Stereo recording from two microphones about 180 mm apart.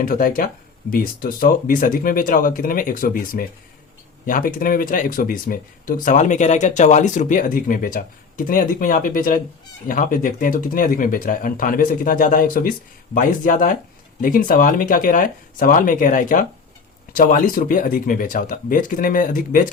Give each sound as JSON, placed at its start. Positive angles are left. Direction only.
{"t": 0.0, "sound": "speech", "side_deg": 55}